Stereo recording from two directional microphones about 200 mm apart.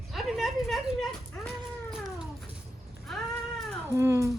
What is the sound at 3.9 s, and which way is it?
Cat, 10° right (ahead or behind).